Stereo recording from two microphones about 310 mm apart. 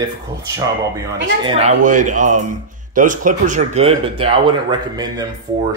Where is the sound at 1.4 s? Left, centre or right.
Centre.